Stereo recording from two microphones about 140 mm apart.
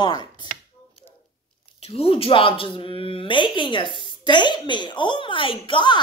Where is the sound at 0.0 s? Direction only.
30° left (ahead or behind).